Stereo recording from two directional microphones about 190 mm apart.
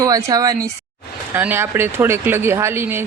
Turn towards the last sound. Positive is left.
turn(degrees=-10)  # may be behind; listen again after turning